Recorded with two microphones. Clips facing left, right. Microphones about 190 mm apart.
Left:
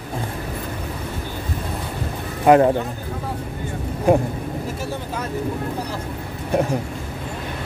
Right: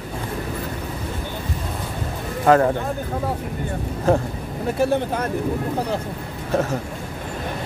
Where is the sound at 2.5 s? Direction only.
15° left (ahead or behind).